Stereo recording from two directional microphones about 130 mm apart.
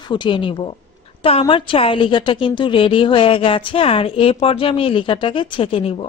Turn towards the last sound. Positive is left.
turn(degrees=45)  # may be behind; listen again after turning